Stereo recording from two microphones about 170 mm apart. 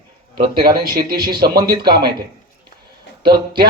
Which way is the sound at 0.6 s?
60° right (ahead or behind).